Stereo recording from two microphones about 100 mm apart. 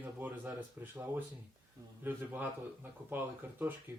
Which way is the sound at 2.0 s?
20° right (ahead or behind).